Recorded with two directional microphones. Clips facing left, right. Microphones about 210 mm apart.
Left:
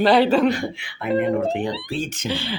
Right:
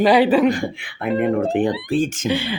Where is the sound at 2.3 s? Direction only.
15° right (ahead or behind).